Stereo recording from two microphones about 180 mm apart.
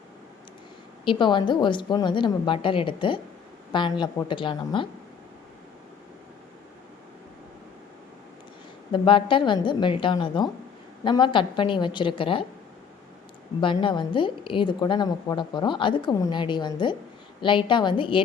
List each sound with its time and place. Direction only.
1.0 s a woman's voice: 25° left (ahead or behind)
8.9 s a woman's voice: 30° left (ahead or behind)
13.6 s a woman's voice: 30° left (ahead or behind)